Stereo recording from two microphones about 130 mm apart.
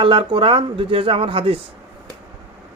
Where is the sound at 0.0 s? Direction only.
40° right (ahead or behind).